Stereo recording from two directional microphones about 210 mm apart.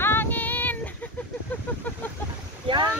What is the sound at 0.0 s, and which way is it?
Child singing, 10° left (ahead or behind).